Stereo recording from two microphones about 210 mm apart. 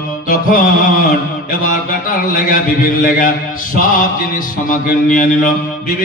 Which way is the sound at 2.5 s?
40° left (ahead or behind).